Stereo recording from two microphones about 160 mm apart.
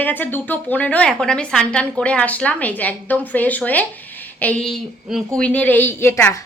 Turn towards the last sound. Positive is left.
turn(degrees=15)  # may be behind; listen again after turning